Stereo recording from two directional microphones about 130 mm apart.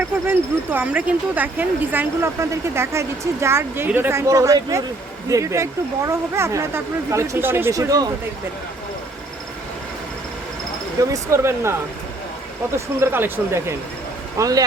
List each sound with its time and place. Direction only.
0.3 s speech: 15° right (ahead or behind)
11.1 s speech: 20° right (ahead or behind)
12.7 s speech: 20° right (ahead or behind)